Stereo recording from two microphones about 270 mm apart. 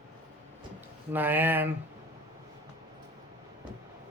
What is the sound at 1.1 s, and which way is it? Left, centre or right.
Speech, centre.